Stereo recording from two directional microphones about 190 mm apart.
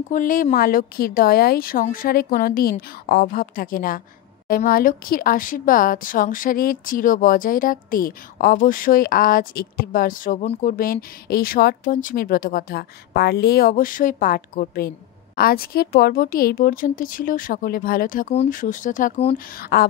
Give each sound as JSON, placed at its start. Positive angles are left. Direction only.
{"t": 0.1, "sound": "speech", "side_deg": 45}
{"t": 19.3, "sound": "speech", "side_deg": 50}